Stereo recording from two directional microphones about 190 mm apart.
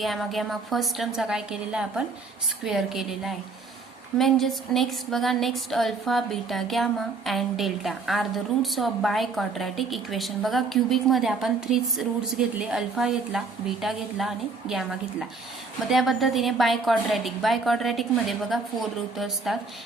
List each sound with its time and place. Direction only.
0.0 s a woman's voice: centre (ahead or behind)